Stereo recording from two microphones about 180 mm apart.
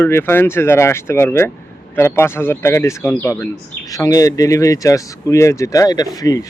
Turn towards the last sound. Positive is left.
turn(degrees=20)  # may be behind; listen again after turning